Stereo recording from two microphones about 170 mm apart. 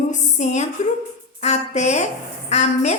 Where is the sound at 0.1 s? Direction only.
45° left (ahead or behind).